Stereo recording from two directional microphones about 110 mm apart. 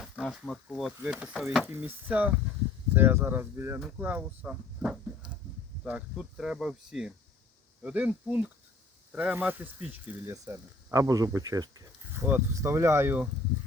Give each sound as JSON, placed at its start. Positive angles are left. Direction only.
{"t": 0.0, "sound": "speech", "side_deg": -5}
{"t": 1.6, "sound": "speech", "side_deg": -20}
{"t": 3.8, "sound": "speech", "side_deg": -5}
{"t": 10.3, "sound": "speech", "side_deg": -30}
{"t": 12.1, "sound": "speech", "side_deg": -20}